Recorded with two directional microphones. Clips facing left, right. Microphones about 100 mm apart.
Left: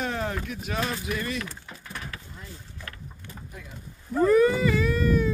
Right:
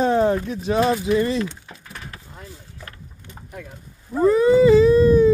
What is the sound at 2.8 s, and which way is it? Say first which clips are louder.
Vehicle: right 1 dB; 30° right (ahead or behind).